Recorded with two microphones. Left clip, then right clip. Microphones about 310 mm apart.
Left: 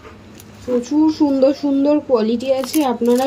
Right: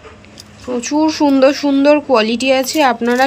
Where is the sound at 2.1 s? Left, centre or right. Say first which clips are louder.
Right 4 dB; right.